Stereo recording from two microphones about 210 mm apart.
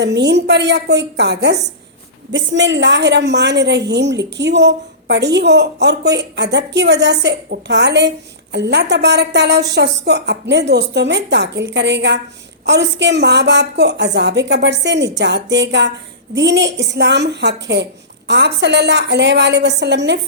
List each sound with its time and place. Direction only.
0.0 s a woman's voice: 55° right (ahead or behind)